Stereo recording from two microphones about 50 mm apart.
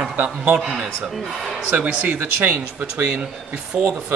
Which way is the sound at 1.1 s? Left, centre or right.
Centre.